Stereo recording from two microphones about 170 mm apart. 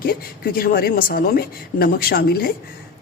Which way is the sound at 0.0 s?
60° left (ahead or behind).